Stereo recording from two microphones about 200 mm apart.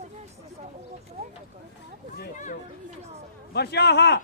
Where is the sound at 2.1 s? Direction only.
40° left (ahead or behind).